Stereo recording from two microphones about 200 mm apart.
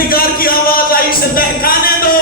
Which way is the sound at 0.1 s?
45° left (ahead or behind).